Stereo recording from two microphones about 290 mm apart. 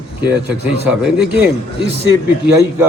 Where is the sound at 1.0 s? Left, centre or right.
Centre.